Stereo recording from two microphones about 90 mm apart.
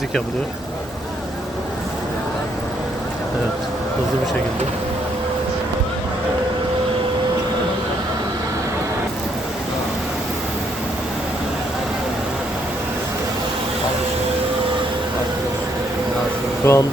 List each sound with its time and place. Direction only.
16.7 s speech: 30° left (ahead or behind)